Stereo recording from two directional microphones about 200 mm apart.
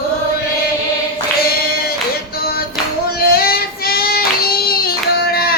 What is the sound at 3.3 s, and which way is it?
Child singing, 50° left (ahead or behind).